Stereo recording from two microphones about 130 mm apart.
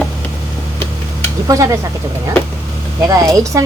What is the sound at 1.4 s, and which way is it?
Speech, 25° right (ahead or behind).